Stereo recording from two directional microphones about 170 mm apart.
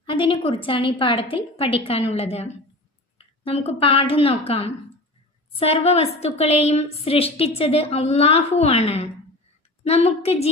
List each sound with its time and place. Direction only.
0.0 s a woman's voice: 30° left (ahead or behind)
3.2 s a sound: 35° left (ahead or behind)
3.7 s a woman's voice: 35° left (ahead or behind)